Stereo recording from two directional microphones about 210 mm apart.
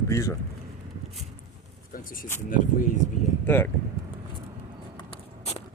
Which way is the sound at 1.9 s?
40° left (ahead or behind).